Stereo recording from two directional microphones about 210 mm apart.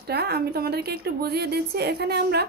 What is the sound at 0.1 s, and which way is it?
A woman's voice, 50° right (ahead or behind).